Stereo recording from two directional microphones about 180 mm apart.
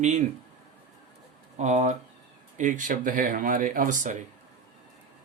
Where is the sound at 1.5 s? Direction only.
40° right (ahead or behind).